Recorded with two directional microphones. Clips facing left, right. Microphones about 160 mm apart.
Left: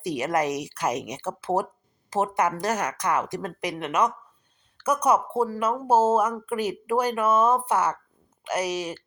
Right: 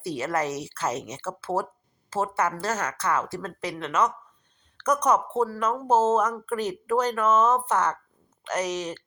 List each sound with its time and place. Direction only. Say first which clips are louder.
0.0 s speech: left 2 dB; 15° left (ahead or behind)